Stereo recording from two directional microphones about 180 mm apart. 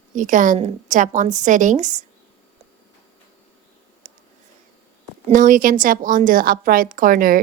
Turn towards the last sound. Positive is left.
turn(degrees=-50)  # may be behind; listen again after turning